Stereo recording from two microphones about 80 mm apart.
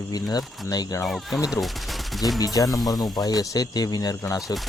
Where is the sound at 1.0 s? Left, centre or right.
Centre.